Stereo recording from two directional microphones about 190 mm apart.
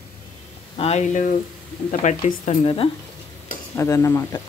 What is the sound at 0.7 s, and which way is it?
Speech, 35° left (ahead or behind).